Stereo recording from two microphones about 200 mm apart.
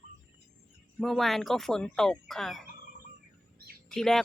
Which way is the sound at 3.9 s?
Centre (ahead or behind).